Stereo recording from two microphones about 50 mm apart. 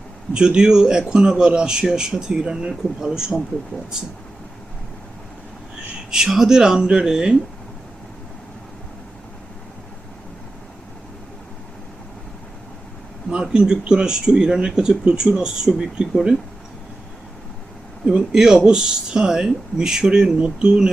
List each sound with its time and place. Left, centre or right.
0.3 s a man's voice: centre
6.1 s a man's voice: centre
13.4 s a man's voice: centre
18.0 s a man's voice: centre